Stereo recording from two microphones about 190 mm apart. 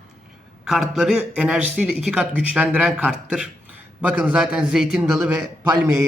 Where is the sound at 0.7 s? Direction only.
Centre (ahead or behind).